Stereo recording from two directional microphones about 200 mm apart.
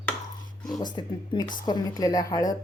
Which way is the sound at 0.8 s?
20° left (ahead or behind).